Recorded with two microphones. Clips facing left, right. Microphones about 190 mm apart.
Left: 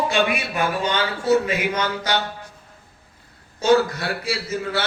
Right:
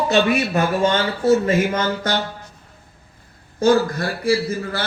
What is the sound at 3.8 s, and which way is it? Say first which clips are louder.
Speech: right 2 dB; 65° left (ahead or behind).